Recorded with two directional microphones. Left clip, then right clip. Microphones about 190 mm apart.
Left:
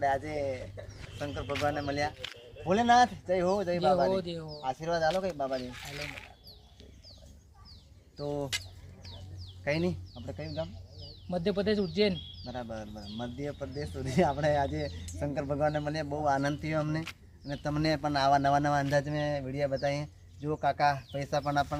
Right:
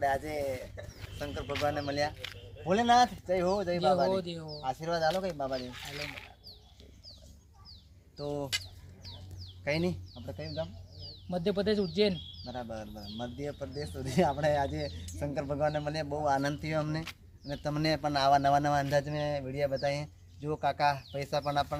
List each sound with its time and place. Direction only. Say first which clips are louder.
0.0 s speech: left 1 dB; 15° right (ahead or behind)
2.1 s speech: left 1 dB; centre (ahead or behind)
4.1 s speech: left 1 dB; 10° left (ahead or behind)
4.6 s speech: left 1 dB; 10° right (ahead or behind)
5.5 s speech: even; 20° right (ahead or behind)
8.2 s speech: left 1 dB; 20° right (ahead or behind)
9.6 s speech: left 1 dB; 15° right (ahead or behind)
10.5 s a sound: even; 20° right (ahead or behind)
11.3 s speech: even; 5° left (ahead or behind)
12.5 s speech: even; 15° right (ahead or behind)